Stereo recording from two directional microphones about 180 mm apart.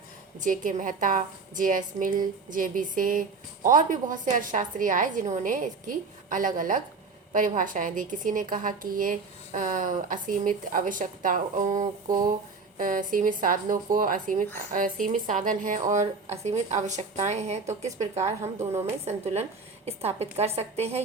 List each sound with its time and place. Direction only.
0.3 s a woman's voice: 45° right (ahead or behind)
18.4 s a woman's voice: 15° right (ahead or behind)
19.0 s a woman's voice: 35° right (ahead or behind)